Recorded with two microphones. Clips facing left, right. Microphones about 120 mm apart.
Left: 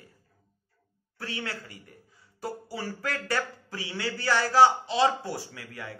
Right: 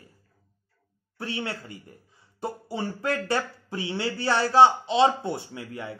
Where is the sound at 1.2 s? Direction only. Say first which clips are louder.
Right 4 dB; 25° right (ahead or behind).